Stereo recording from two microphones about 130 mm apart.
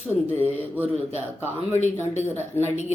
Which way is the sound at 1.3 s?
15° left (ahead or behind).